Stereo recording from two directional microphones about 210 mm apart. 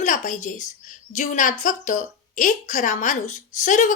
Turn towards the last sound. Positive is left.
turn(degrees=35)  # may be behind; listen again after turning